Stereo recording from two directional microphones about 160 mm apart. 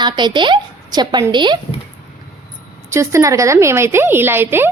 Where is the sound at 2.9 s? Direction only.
15° right (ahead or behind).